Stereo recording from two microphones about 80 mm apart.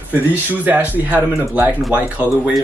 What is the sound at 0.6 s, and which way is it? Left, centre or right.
Speech, right.